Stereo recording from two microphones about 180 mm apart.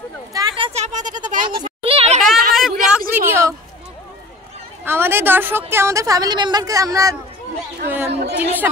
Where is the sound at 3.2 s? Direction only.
15° right (ahead or behind).